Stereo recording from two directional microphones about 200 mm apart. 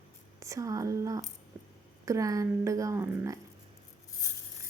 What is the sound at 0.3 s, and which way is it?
Speech, 15° right (ahead or behind).